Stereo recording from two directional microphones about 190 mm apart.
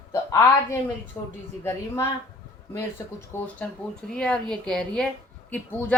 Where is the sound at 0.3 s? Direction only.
15° left (ahead or behind).